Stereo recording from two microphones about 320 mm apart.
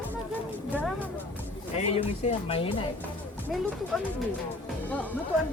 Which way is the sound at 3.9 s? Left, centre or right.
Centre.